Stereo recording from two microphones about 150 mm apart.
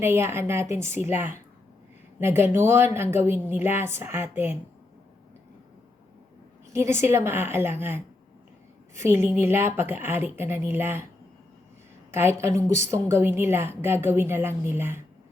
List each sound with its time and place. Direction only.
0.0 s a woman's voice: 15° right (ahead or behind)
6.7 s a woman's voice: 20° right (ahead or behind)
12.1 s a woman's voice: 15° right (ahead or behind)